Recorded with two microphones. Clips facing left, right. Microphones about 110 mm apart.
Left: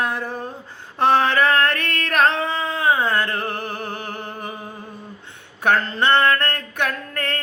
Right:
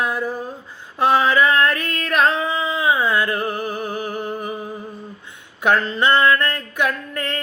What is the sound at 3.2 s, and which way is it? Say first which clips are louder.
Music: right 3 dB; 10° right (ahead or behind).